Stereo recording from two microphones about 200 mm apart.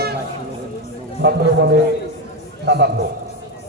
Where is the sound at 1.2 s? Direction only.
60° right (ahead or behind).